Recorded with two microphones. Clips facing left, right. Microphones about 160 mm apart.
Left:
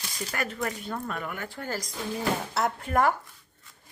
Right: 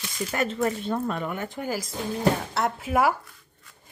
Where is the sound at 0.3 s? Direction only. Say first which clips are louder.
Right 6 dB; 25° right (ahead or behind); by 3.2 s 5° right (ahead or behind).